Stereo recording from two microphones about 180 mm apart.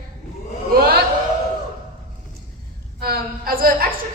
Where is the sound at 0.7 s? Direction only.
60° right (ahead or behind).